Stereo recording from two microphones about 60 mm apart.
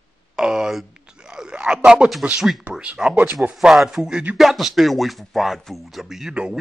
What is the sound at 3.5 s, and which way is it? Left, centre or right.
Speech, centre.